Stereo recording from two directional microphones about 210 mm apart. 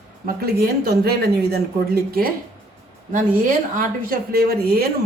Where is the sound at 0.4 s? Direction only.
45° right (ahead or behind).